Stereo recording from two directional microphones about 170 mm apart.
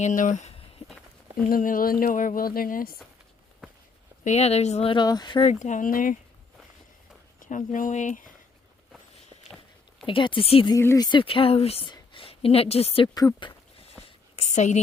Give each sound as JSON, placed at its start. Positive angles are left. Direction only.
{"t": 0.0, "sound": "speech", "side_deg": 50}
{"t": 1.5, "sound": "speech", "side_deg": 55}
{"t": 4.2, "sound": "speech", "side_deg": 40}
{"t": 5.5, "sound": "speech", "side_deg": 45}
{"t": 7.3, "sound": "speech", "side_deg": 50}
{"t": 10.1, "sound": "speech", "side_deg": 30}
{"t": 10.8, "sound": "a woman's voice", "side_deg": 20}
{"t": 13.1, "sound": "a sound", "side_deg": 25}
{"t": 14.3, "sound": "a sound", "side_deg": 40}